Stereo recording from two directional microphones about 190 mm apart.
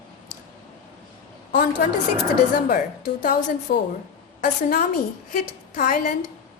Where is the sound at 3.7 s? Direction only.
50° left (ahead or behind).